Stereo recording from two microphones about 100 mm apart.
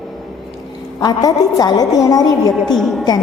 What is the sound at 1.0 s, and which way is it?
A woman's voice, 40° left (ahead or behind).